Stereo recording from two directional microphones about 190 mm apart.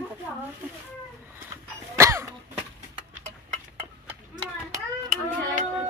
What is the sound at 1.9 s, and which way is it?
Cough, 15° right (ahead or behind).